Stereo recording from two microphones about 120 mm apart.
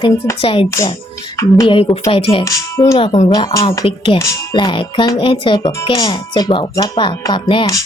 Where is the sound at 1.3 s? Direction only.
25° left (ahead or behind).